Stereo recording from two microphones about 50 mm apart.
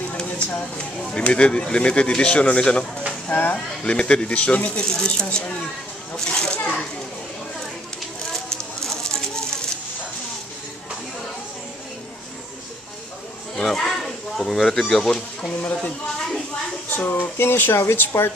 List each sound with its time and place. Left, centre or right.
0.1 s a sound: left
0.7 s speech: left
3.3 s speech: left
3.8 s a child's voice: centre
8.3 s a sound: centre
13.6 s speech: centre
15.6 s speech: left
16.9 s speech: left